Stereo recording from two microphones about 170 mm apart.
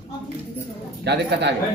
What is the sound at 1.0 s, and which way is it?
Speech, 85° right.